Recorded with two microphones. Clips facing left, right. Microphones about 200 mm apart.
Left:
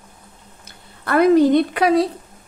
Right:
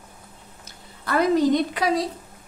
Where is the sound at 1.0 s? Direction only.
60° left (ahead or behind).